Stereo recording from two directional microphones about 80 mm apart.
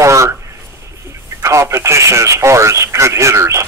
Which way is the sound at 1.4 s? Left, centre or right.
Right.